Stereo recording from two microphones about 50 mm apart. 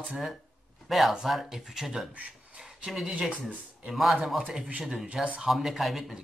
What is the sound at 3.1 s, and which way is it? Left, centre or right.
Speech, centre.